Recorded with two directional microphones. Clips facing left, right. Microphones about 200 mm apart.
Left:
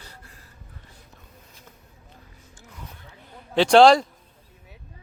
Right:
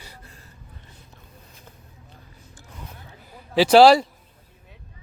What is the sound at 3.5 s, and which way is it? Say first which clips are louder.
Speech: right 1 dB; 5° right (ahead or behind).